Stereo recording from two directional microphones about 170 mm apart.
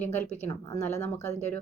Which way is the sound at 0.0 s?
10° left (ahead or behind).